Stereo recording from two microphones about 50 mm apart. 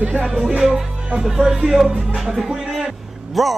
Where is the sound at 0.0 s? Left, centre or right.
Right.